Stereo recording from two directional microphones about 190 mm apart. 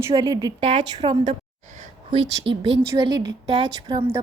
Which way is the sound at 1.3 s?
40° right (ahead or behind).